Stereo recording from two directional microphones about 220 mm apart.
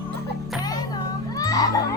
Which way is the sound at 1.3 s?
15° left (ahead or behind).